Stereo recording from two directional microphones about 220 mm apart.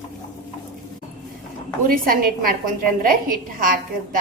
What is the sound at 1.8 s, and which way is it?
A woman's voice, 40° right (ahead or behind).